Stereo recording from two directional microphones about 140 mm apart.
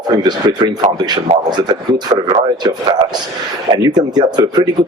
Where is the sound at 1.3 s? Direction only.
50° right (ahead or behind).